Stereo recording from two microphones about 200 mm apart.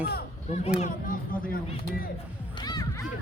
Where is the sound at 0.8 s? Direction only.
45° left (ahead or behind).